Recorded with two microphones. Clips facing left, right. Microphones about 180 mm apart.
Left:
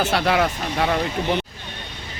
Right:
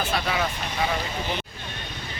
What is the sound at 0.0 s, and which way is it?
Speech, 80° left.